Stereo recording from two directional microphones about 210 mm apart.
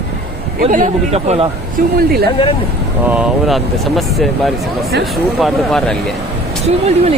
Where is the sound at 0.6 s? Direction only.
35° right (ahead or behind).